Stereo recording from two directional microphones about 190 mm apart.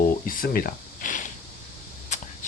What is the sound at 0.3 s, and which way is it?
Snake, 50° left (ahead or behind).